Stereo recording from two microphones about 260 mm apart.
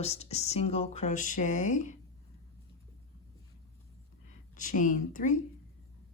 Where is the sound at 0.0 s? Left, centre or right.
Left.